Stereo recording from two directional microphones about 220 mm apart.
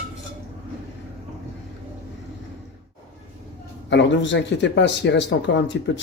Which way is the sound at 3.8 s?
55° left (ahead or behind).